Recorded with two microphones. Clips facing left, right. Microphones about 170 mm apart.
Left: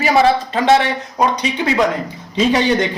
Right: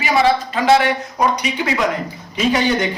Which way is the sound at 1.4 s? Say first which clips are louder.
Left 3 dB; 25° left (ahead or behind).